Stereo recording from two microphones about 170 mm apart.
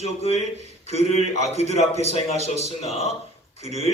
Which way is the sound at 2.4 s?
40° right (ahead or behind).